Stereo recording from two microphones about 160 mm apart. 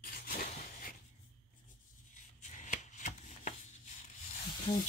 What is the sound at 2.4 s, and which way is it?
Chopping, 50° left (ahead or behind).